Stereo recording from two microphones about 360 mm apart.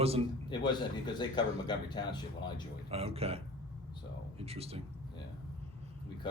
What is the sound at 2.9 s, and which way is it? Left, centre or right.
Speech, centre.